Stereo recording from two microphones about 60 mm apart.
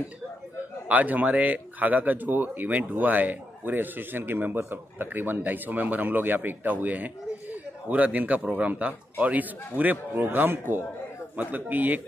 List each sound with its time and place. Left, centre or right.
0.8 s speech: right